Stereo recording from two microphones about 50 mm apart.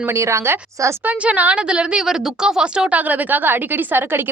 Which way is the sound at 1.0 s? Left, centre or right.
Right.